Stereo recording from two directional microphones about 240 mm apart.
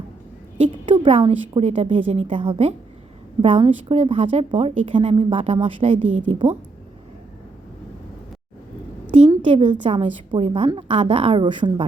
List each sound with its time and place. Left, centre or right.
0.6 s a woman's voice: right
6.0 s a woman's voice: right
9.1 s a sound: right
9.8 s a woman's voice: right